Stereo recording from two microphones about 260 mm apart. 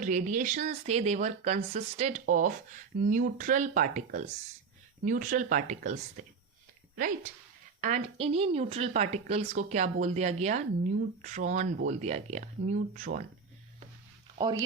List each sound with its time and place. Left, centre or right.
0.0 s speech: right
7.8 s speech: right
14.3 s speech: centre